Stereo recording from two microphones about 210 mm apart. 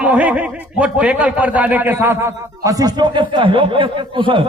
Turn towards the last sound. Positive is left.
turn(degrees=-25)  # may be behind; listen again after turning